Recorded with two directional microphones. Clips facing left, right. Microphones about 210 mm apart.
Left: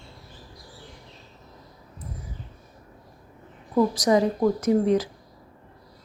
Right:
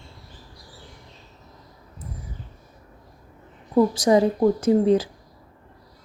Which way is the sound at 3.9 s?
30° right (ahead or behind).